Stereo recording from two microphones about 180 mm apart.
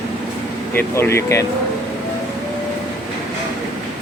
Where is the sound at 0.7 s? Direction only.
15° left (ahead or behind).